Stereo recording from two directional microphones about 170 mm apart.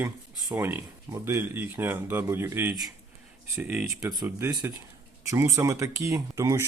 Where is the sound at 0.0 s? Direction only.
15° right (ahead or behind).